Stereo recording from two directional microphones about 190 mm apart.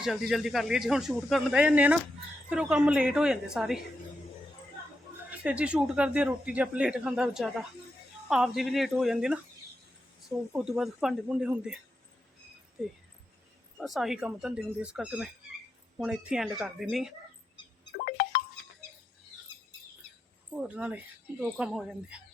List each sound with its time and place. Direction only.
0.0 s speech: centre (ahead or behind)
5.3 s speech: 5° right (ahead or behind)
13.7 s speech: centre (ahead or behind)
18.0 s a sound: 50° left (ahead or behind)
20.6 s speech: 5° right (ahead or behind)